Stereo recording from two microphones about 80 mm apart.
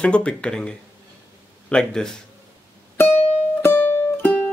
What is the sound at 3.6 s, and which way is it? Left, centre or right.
Music, left.